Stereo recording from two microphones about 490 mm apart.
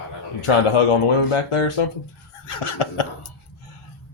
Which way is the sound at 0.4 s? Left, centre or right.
Left.